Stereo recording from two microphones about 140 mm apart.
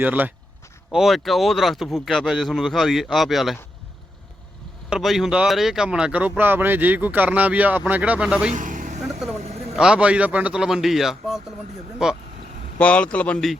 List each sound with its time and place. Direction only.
0.0 s speech: 10° right (ahead or behind)
0.9 s speech: centre (ahead or behind)
4.9 s speech: centre (ahead or behind)
8.5 s vehicle: 65° right (ahead or behind)
9.6 s speech: 5° right (ahead or behind)
12.8 s speech: 10° left (ahead or behind)